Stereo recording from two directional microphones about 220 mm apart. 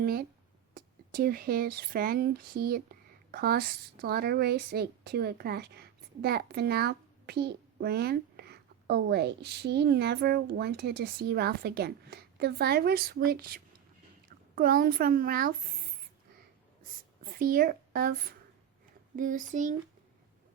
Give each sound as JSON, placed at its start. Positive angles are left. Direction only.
{"t": 0.0, "sound": "speech", "side_deg": -45}
{"t": 17.3, "sound": "speech", "side_deg": -40}